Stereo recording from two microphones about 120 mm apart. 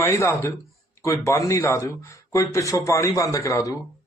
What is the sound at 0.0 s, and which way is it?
A man's voice, 20° left (ahead or behind).